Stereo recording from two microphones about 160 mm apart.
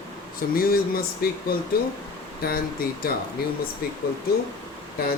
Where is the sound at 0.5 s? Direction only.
65° left (ahead or behind).